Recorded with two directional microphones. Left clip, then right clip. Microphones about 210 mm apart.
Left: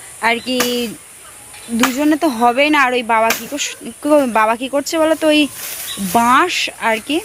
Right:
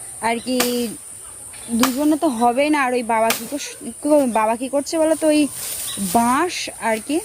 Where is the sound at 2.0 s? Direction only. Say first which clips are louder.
Left 4 dB; 5° left (ahead or behind).